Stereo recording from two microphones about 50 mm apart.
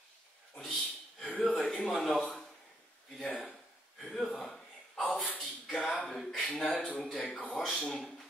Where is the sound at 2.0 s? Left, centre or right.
Centre.